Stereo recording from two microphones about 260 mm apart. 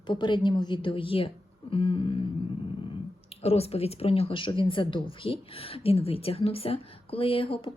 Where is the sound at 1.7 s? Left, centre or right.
Centre.